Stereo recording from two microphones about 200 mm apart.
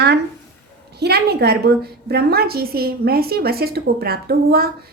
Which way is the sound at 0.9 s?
55° right (ahead or behind).